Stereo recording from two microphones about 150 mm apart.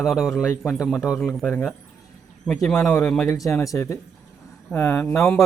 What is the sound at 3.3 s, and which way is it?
A man's voice, 20° left (ahead or behind).